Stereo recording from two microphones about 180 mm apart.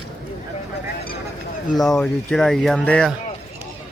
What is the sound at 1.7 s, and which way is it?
Speech, centre (ahead or behind).